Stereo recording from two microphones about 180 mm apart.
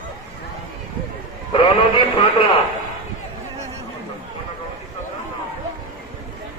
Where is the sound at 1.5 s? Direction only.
25° left (ahead or behind).